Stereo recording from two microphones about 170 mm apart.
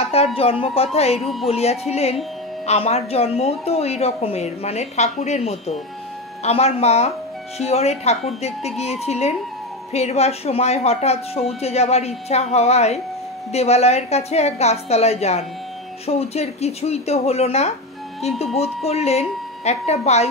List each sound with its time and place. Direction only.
0.1 s a woman's voice: 35° left (ahead or behind)
1.2 s music: centre (ahead or behind)
1.5 s a woman's voice: 40° left (ahead or behind)